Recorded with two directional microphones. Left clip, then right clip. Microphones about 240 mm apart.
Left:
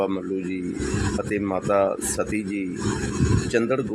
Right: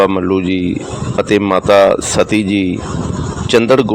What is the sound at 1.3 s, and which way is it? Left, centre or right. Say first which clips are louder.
Speech: right 14 dB; right.